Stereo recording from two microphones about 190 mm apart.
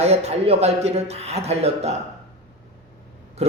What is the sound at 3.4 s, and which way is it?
Speech, 35° right (ahead or behind).